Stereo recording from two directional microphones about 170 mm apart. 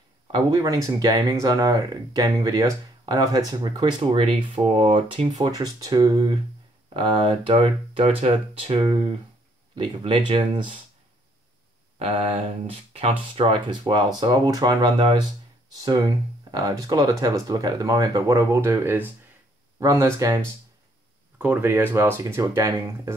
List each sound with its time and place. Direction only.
0.3 s speech: 20° right (ahead or behind)
12.0 s speech: 35° right (ahead or behind); by 20.3 s 15° right (ahead or behind)
21.4 s speech: 10° right (ahead or behind)